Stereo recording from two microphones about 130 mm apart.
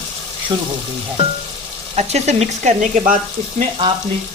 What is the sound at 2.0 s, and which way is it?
Frying, 55° right (ahead or behind).